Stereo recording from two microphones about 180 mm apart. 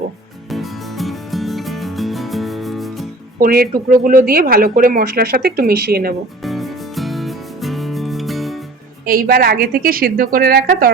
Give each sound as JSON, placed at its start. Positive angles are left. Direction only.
{"t": 0.5, "sound": "music", "side_deg": 0}
{"t": 3.4, "sound": "speech", "side_deg": -55}
{"t": 6.4, "sound": "music", "side_deg": 0}
{"t": 9.0, "sound": "speech", "side_deg": -55}